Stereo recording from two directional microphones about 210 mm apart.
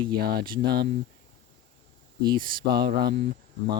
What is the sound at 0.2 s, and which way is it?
Speech, 50° right (ahead or behind).